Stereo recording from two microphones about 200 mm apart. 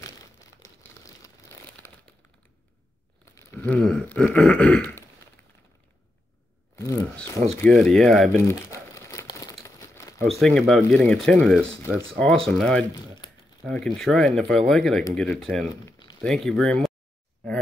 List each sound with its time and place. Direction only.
0.8 s crumpling: 15° left (ahead or behind)
3.3 s a sound: 10° left (ahead or behind)
7.6 s speech: centre (ahead or behind)
8.3 s crumpling: 10° left (ahead or behind)
10.4 s speech: centre (ahead or behind)
13.2 s a sound: 20° left (ahead or behind)
13.7 s speech: 5° left (ahead or behind)
15.7 s a sound: 20° left (ahead or behind)
16.2 s speech: centre (ahead or behind)